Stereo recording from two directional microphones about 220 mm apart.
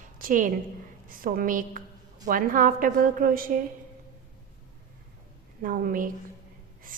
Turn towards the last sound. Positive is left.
turn(degrees=-40)  # may be behind; listen again after turning